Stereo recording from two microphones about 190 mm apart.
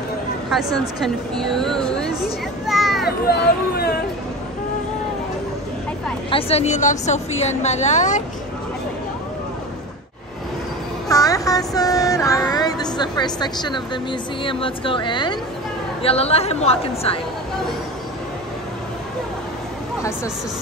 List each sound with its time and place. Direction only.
1.0 s a sound: centre (ahead or behind)
3.1 s speech: 55° left (ahead or behind)
6.3 s a woman's voice: 35° left (ahead or behind)
11.1 s a woman's voice: 20° left (ahead or behind)